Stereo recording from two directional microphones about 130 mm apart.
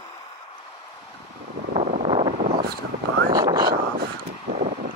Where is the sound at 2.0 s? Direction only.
35° right (ahead or behind).